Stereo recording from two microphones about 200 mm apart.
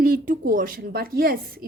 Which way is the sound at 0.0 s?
45° right (ahead or behind).